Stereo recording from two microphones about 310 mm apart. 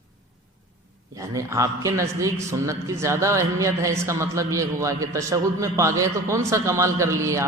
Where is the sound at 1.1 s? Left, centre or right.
Centre.